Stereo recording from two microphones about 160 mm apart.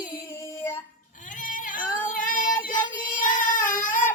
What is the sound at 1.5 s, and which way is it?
Female singing, 55° left (ahead or behind).